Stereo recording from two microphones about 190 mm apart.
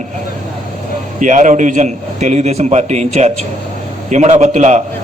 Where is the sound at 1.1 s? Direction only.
40° right (ahead or behind).